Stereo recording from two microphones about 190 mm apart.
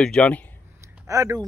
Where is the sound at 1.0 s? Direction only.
15° right (ahead or behind).